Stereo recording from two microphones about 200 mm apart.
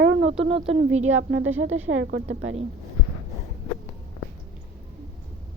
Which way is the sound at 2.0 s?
60° right (ahead or behind).